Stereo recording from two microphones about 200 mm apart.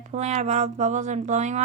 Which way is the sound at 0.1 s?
35° right (ahead or behind).